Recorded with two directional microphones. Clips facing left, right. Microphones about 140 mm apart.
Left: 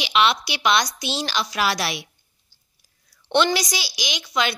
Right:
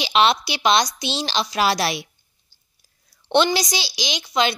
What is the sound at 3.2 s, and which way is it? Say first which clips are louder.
A woman's voice: right 2 dB; 30° right (ahead or behind).